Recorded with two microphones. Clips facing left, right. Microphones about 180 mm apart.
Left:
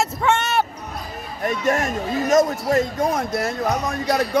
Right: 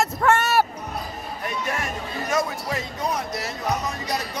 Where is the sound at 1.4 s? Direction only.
45° left (ahead or behind).